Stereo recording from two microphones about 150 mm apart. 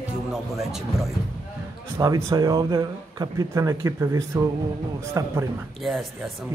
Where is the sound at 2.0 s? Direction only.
20° right (ahead or behind).